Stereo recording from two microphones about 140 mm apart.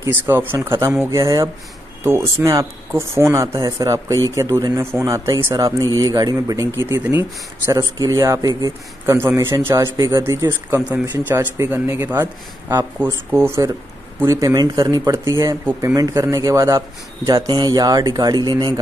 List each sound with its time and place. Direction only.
0.0 s speech: 15° right (ahead or behind); by 18.7 s 30° right (ahead or behind)